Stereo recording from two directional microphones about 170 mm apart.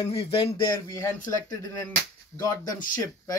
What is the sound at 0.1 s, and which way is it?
Speech, 35° left (ahead or behind).